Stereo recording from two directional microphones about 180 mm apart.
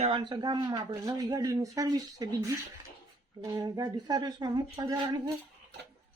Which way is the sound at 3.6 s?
20° right (ahead or behind).